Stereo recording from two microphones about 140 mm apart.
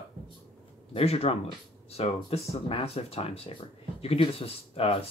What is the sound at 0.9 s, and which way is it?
Speech, 45° left (ahead or behind).